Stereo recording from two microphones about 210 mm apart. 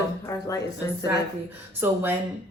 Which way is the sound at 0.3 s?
15° left (ahead or behind).